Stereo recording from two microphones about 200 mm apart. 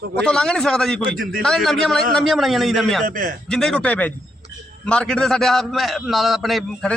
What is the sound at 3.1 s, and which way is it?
Speech, 45° right (ahead or behind).